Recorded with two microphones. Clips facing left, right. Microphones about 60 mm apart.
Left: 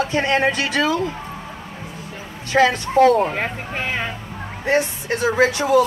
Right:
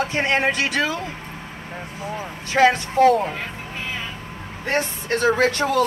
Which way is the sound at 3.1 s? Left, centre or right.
Left.